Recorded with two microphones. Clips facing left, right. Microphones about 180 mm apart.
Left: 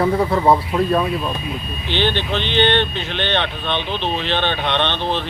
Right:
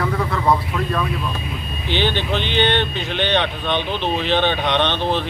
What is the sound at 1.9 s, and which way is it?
Speech, 10° right (ahead or behind).